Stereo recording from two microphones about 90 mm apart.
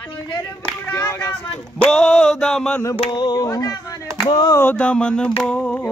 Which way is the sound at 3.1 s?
50° left (ahead or behind).